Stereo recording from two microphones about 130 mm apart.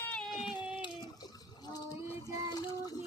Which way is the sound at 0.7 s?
35° left (ahead or behind).